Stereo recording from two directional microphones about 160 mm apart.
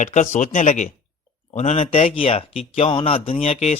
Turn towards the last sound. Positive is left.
turn(degrees=40)  # may be behind; listen again after turning